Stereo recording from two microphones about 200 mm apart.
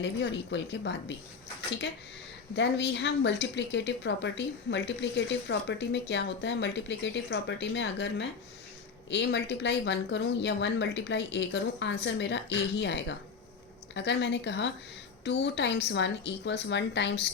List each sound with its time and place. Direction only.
0.0 s speech: 60° left (ahead or behind)
2.6 s speech: 60° left (ahead or behind)